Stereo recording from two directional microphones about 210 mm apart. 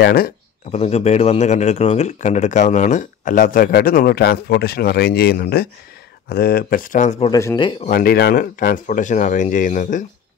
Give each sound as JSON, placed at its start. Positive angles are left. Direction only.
{"t": 0.0, "sound": "speech", "side_deg": 45}
{"t": 0.7, "sound": "speech", "side_deg": 30}
{"t": 7.2, "sound": "speech", "side_deg": 15}
{"t": 7.8, "sound": "speech", "side_deg": 45}